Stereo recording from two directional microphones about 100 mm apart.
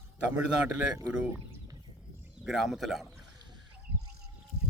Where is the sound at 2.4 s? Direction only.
Centre (ahead or behind).